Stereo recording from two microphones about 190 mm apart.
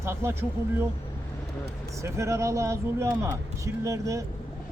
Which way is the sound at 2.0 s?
15° right (ahead or behind).